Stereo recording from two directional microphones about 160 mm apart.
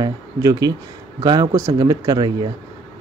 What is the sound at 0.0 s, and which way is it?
Speech, 25° right (ahead or behind).